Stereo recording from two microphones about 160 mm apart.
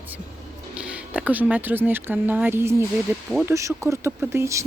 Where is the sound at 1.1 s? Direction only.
10° right (ahead or behind).